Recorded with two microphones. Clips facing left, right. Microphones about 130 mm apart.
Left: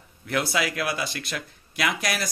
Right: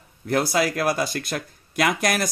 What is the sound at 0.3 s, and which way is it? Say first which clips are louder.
A man's voice: right 5 dB; 40° right (ahead or behind).